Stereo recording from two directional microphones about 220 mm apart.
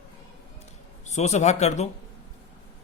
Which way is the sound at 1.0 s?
30° left (ahead or behind).